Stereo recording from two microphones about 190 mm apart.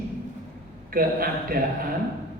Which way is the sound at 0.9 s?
50° right (ahead or behind).